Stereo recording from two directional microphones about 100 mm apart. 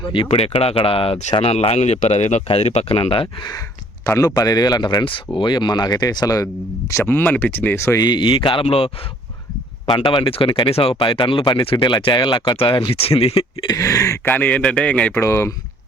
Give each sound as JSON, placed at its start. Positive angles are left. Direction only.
{"t": 0.1, "sound": "speech", "side_deg": 75}
{"t": 4.0, "sound": "speech", "side_deg": 30}
{"t": 4.4, "sound": "speech", "side_deg": 40}
{"t": 7.0, "sound": "speech", "side_deg": 20}
{"t": 7.9, "sound": "speech", "side_deg": 45}
{"t": 9.8, "sound": "speech", "side_deg": 50}
{"t": 13.7, "sound": "speech", "side_deg": 35}
{"t": 14.3, "sound": "a man's voice", "side_deg": 15}
{"t": 15.1, "sound": "speech", "side_deg": 25}